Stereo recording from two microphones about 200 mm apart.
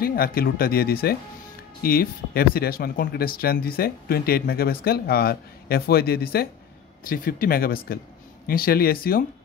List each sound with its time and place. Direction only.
0.0 s speech: 50° left (ahead or behind)